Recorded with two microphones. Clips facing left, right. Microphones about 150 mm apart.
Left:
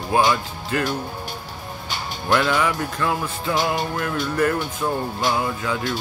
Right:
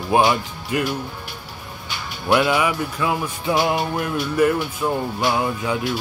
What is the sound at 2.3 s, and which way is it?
Music, 15° right (ahead or behind).